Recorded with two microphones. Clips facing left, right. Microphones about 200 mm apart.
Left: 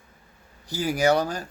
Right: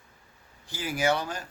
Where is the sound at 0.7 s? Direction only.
40° left (ahead or behind).